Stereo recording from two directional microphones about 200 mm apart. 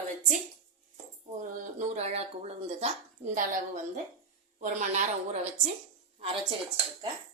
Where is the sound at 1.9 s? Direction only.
35° right (ahead or behind).